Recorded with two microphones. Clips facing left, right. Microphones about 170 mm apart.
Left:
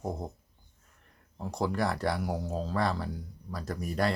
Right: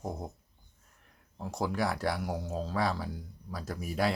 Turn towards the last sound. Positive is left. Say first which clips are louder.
# left 1 dB
turn(degrees=-5)  # may be behind; listen again after turning